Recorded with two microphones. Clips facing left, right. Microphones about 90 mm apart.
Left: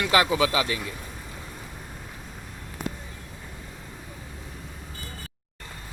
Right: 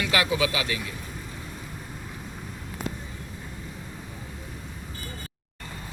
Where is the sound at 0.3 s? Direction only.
35° left (ahead or behind).